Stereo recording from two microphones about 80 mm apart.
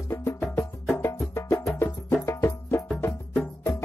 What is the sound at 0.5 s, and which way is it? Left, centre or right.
Music, left.